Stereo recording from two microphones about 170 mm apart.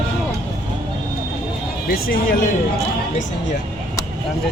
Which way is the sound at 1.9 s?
60° left (ahead or behind).